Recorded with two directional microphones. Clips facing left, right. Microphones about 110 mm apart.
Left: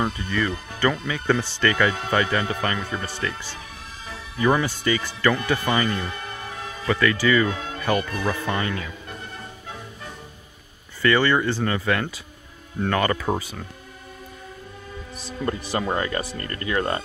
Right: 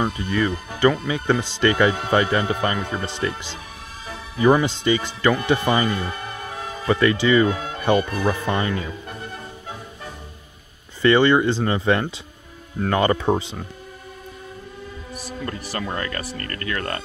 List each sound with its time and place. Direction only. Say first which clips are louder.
0.2 s speech: right 3 dB; 15° right (ahead or behind)
11.0 s speech: right 4 dB; 20° right (ahead or behind)
15.1 s speech: left 3 dB; 20° left (ahead or behind)